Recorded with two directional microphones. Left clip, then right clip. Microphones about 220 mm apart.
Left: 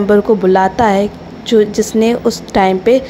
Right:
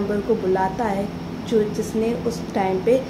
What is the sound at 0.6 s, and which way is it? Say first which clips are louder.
A woman's voice: left 11 dB; 40° left (ahead or behind).